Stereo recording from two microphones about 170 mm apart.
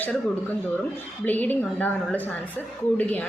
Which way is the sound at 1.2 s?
10° left (ahead or behind).